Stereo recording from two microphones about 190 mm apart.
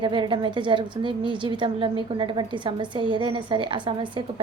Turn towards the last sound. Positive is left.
turn(degrees=-25)  # may be behind; listen again after turning